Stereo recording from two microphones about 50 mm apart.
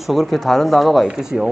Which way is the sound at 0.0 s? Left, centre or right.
Centre.